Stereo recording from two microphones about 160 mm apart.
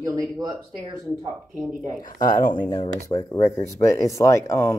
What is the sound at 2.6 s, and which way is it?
Speech, 25° left (ahead or behind).